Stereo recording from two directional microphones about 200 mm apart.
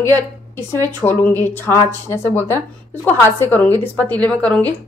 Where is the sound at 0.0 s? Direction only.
15° left (ahead or behind).